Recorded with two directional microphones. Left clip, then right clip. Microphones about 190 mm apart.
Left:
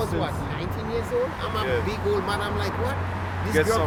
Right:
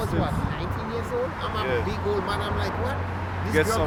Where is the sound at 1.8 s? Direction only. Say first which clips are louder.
Left 1 dB; 30° left (ahead or behind).